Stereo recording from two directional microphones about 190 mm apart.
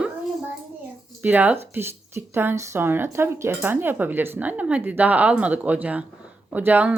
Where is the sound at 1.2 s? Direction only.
10° right (ahead or behind).